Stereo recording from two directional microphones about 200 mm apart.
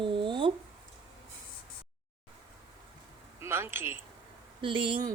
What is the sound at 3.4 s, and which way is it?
Speech, 10° right (ahead or behind).